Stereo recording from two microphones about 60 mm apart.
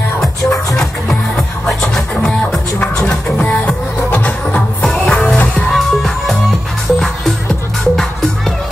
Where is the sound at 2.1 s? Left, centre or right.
Left.